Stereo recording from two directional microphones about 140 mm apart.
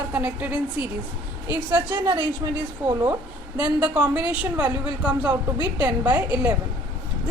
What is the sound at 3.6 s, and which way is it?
A woman's voice, 10° right (ahead or behind).